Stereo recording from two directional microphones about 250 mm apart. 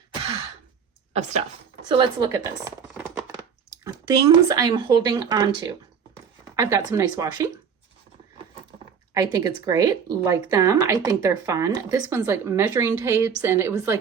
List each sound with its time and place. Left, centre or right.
1.1 s speech: right
6.6 s speech: centre
9.1 s speech: centre